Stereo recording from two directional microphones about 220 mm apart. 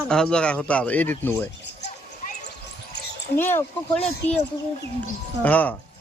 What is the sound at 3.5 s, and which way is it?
Speech, 5° left (ahead or behind).